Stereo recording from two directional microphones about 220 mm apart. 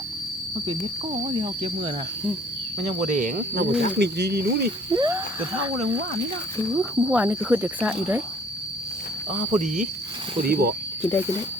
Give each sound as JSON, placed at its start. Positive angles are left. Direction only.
{"t": 0.7, "sound": "speech", "side_deg": -25}
{"t": 3.1, "sound": "speech", "side_deg": -35}
{"t": 4.9, "sound": "speech", "side_deg": -15}
{"t": 6.7, "sound": "speech", "side_deg": -5}
{"t": 9.5, "sound": "speech", "side_deg": -35}